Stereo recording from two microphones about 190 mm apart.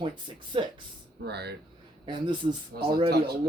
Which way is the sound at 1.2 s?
60° right (ahead or behind).